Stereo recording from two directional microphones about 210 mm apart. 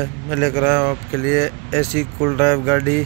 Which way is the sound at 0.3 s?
5° left (ahead or behind).